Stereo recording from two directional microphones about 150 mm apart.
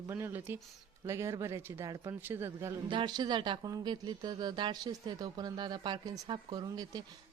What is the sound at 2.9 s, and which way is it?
Speech, 30° right (ahead or behind).